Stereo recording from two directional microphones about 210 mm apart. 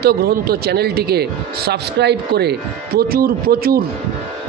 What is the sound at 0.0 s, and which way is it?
Speech, 50° right (ahead or behind).